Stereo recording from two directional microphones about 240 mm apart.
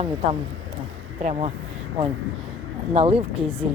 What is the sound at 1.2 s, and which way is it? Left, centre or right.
Speech, right.